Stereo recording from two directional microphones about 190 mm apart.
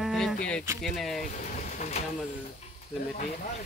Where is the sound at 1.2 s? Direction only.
40° left (ahead or behind).